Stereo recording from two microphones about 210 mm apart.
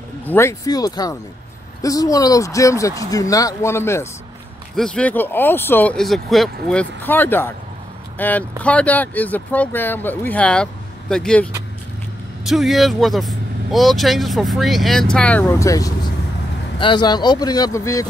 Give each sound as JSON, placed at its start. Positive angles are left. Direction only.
{"t": 0.2, "sound": "speech", "side_deg": 10}
{"t": 12.4, "sound": "speech", "side_deg": 0}